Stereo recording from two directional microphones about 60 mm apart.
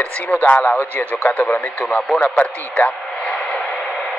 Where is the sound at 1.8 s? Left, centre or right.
Centre.